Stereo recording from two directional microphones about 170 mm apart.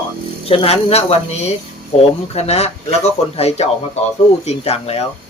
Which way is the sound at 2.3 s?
40° left (ahead or behind).